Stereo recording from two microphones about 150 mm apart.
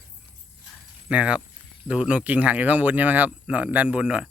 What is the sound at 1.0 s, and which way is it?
Speech, 10° right (ahead or behind).